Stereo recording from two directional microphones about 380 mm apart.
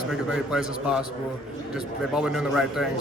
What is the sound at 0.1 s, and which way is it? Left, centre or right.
Speech, centre.